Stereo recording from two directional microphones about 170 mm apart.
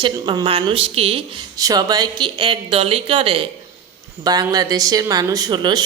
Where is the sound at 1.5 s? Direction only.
20° right (ahead or behind).